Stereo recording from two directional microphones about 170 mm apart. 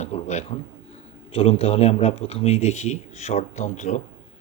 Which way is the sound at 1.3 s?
35° left (ahead or behind).